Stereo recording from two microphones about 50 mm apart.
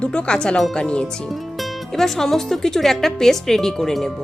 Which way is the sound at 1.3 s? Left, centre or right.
Centre.